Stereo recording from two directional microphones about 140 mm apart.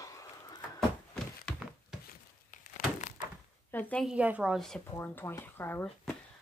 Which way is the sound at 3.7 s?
10° left (ahead or behind).